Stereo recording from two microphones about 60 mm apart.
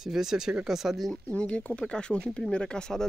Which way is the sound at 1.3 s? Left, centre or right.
Centre.